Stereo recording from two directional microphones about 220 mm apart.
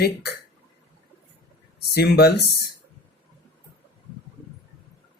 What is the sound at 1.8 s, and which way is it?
Speech, 45° left (ahead or behind).